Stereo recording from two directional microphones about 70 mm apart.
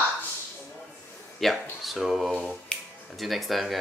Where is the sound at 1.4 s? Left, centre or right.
Centre.